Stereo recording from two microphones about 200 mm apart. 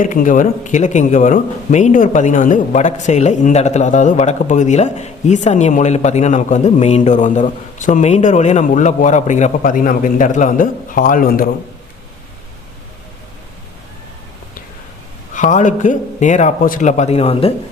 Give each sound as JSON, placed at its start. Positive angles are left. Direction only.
{"t": 0.0, "sound": "speech", "side_deg": 40}
{"t": 15.4, "sound": "speech", "side_deg": 40}